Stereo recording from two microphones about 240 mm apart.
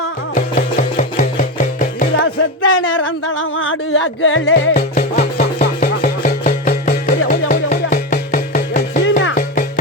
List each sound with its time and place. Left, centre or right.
0.3 s music: left
2.1 s speech: left
4.7 s music: left
9.0 s music: left